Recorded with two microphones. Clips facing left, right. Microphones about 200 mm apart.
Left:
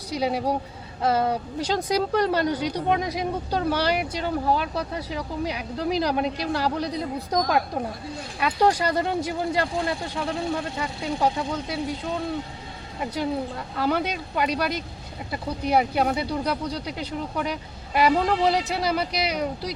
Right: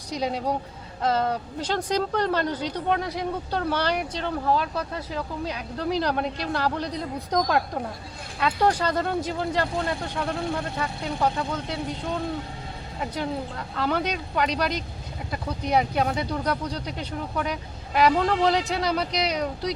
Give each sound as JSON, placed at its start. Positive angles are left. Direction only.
{"t": 0.1, "sound": "speech", "side_deg": 10}
{"t": 13.7, "sound": "speech", "side_deg": 10}